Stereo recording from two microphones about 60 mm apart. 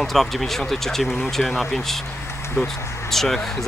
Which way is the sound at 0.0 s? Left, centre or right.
Centre.